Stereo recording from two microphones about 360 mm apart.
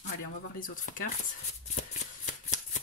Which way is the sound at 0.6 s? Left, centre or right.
Left.